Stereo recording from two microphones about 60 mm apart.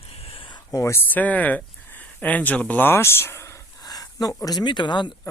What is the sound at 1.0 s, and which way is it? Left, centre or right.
Speech, left.